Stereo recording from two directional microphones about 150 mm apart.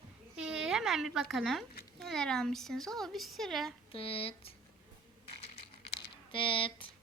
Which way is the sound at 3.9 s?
40° left (ahead or behind).